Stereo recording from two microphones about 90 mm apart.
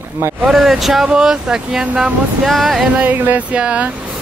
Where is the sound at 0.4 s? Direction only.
5° right (ahead or behind).